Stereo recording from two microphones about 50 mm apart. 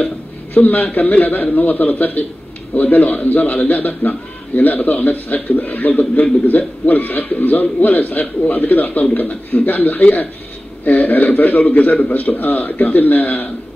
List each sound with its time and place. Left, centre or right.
0.6 s a man's voice: left